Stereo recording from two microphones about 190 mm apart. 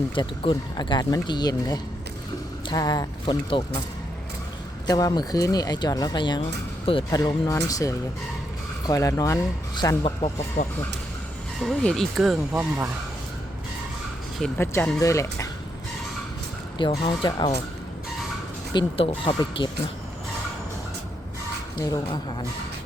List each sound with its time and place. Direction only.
0.1 s speech: 25° left (ahead or behind)
4.9 s speech: 20° left (ahead or behind)
10.6 s speech: 45° left (ahead or behind)
11.6 s speech: 5° left (ahead or behind)
14.6 s speech: 15° left (ahead or behind)
16.7 s speech: 25° left (ahead or behind)
18.7 s speech: 25° left (ahead or behind)
21.8 s speech: 20° left (ahead or behind)